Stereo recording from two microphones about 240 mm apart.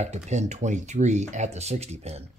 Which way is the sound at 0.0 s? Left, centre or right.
Right.